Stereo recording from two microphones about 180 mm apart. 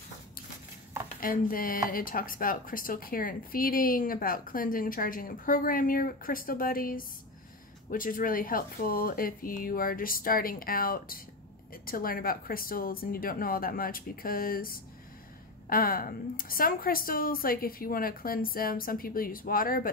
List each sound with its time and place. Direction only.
1.2 s speech: 50° left (ahead or behind)